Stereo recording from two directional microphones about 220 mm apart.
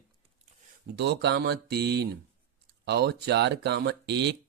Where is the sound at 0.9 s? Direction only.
50° right (ahead or behind).